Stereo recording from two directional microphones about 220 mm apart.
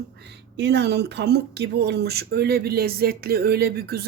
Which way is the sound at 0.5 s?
50° right (ahead or behind).